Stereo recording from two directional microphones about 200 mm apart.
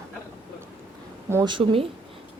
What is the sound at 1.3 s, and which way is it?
Speech, 20° right (ahead or behind).